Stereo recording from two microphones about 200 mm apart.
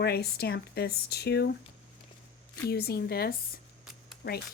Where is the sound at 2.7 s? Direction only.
50° left (ahead or behind).